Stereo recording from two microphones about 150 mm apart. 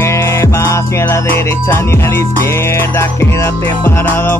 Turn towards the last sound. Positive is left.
turn(degrees=15)  # may be behind; listen again after turning